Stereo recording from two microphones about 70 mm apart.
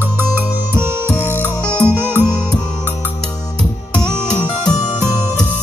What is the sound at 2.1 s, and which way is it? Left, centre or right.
Music, right.